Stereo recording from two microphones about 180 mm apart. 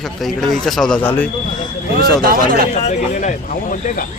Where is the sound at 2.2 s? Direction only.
55° right (ahead or behind).